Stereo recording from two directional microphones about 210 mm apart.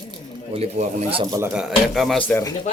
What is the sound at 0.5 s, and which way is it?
Speech, 30° right (ahead or behind).